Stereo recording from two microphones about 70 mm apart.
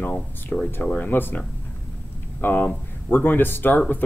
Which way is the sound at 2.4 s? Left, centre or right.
Left.